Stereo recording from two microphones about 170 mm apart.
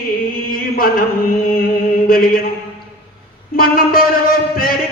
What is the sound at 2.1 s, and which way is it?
Mantra, 60° left (ahead or behind).